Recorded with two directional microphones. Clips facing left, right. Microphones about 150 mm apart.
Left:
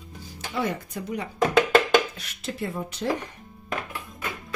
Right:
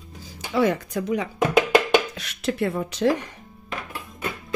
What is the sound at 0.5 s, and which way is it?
Speech, 90° right.